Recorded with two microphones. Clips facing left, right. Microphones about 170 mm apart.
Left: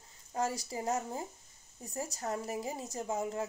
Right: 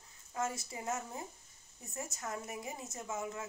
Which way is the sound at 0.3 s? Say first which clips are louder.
Left 4 dB; 35° left (ahead or behind).